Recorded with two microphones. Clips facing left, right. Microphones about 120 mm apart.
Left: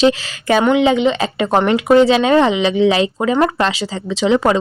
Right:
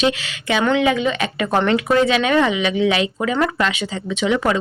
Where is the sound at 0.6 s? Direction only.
20° left (ahead or behind).